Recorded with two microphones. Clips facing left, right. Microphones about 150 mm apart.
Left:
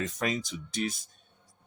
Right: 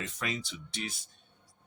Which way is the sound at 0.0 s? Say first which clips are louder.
Left 6 dB; 40° left (ahead or behind).